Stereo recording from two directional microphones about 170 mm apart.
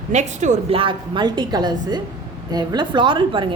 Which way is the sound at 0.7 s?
30° right (ahead or behind).